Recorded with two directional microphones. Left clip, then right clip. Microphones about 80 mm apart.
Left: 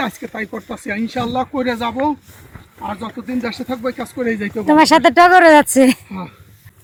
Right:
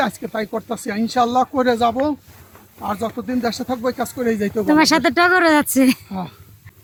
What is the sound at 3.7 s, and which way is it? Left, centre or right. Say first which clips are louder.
Speech: right 1 dB; right.